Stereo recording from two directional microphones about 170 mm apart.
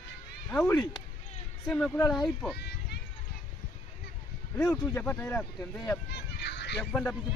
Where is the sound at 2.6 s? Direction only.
75° left (ahead or behind).